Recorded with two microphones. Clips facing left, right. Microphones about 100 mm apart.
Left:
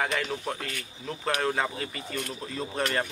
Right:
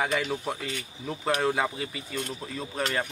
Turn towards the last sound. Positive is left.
turn(degrees=0)  # may be behind; listen again after turning